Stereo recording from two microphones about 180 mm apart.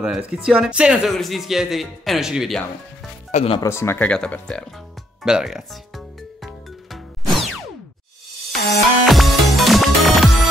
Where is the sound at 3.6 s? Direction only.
15° left (ahead or behind); by 5.6 s 5° right (ahead or behind).